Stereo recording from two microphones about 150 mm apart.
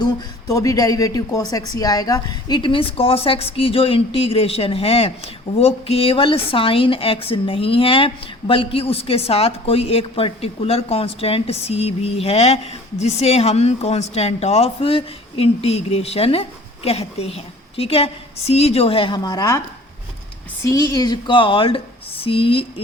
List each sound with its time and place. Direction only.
0.0 s a woman's voice: 25° left (ahead or behind)
20.7 s a woman's voice: 25° left (ahead or behind)